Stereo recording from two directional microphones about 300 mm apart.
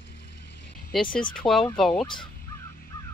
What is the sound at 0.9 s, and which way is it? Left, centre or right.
Speech, centre.